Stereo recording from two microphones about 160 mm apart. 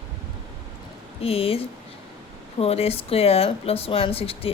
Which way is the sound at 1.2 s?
40° left (ahead or behind).